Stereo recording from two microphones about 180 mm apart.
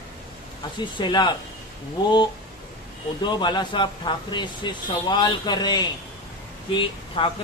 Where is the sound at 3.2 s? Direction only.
25° left (ahead or behind).